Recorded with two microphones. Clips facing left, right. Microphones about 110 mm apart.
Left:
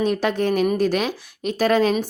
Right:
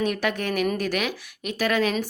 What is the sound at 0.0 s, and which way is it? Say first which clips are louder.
Speech: left 5 dB; 30° left (ahead or behind).